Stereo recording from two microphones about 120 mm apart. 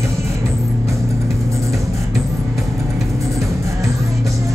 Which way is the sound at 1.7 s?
Centre (ahead or behind).